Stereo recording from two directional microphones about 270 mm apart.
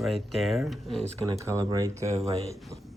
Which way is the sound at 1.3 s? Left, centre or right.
Centre.